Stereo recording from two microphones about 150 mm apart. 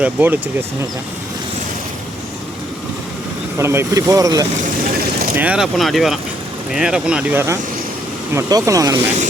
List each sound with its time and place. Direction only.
0.0 s speech: 10° right (ahead or behind)
3.6 s speech: 15° right (ahead or behind)
5.4 s speech: 5° right (ahead or behind)
8.4 s speech: 20° right (ahead or behind)